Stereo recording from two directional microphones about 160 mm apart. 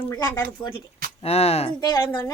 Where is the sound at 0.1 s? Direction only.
20° left (ahead or behind).